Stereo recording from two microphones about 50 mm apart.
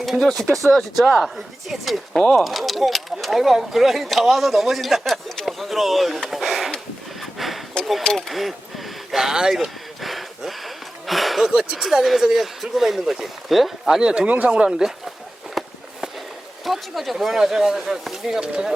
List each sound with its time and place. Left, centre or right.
0.0 s speech: centre
1.0 s speech: centre
1.7 s speech: centre
7.2 s a sound: centre
8.1 s speech: centre
10.0 s a sound: centre
11.5 s speech: centre
14.3 s speech: right; by 15.1 s centre
15.6 s walk: centre
16.6 s speech: centre
18.4 s speech: centre